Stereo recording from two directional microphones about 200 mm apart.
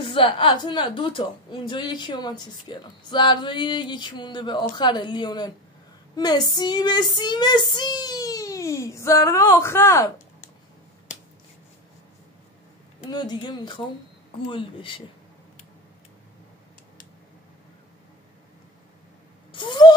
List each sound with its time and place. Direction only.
0.0 s a woman's voice: 25° left (ahead or behind)
13.1 s a woman's voice: 20° left (ahead or behind)
19.5 s a sound: 25° left (ahead or behind)